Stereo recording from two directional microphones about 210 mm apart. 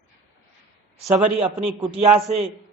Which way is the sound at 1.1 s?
30° right (ahead or behind).